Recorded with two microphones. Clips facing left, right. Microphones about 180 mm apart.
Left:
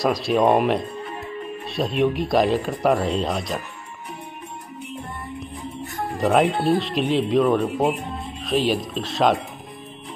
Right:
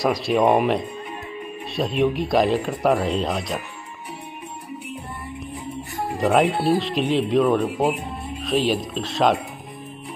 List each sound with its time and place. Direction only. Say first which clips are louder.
0.0 s speech: even; centre (ahead or behind)
6.1 s speech: even; centre (ahead or behind)